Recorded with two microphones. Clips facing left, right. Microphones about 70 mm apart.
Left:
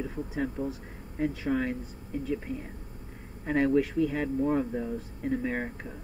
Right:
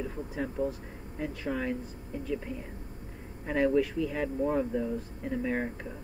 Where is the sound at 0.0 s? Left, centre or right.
Centre.